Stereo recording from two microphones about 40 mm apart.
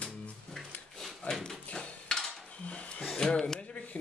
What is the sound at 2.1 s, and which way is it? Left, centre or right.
Dishes, centre.